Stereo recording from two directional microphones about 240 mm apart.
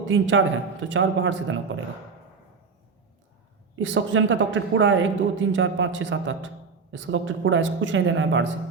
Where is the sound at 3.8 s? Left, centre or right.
Right.